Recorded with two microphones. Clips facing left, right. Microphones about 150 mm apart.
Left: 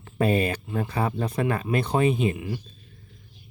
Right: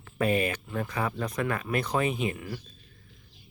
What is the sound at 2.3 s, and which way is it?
Speech, 20° left (ahead or behind).